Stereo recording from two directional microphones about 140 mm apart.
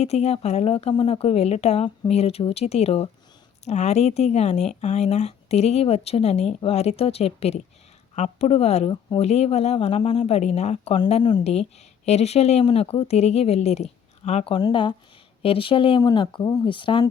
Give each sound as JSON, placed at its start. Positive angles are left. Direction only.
{"t": 0.0, "sound": "speech", "side_deg": 50}
{"t": 8.9, "sound": "speech", "side_deg": 30}
{"t": 9.2, "sound": "speech", "side_deg": 50}
{"t": 11.2, "sound": "speech", "side_deg": 30}
{"t": 12.0, "sound": "speech", "side_deg": 50}
{"t": 14.5, "sound": "speech", "side_deg": 35}
{"t": 16.0, "sound": "speech", "side_deg": 30}